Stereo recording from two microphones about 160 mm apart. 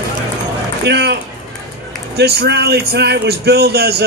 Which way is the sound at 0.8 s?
90° right.